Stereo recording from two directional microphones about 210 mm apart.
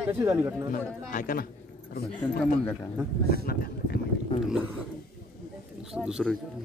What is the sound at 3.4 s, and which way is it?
Speech, 45° left (ahead or behind).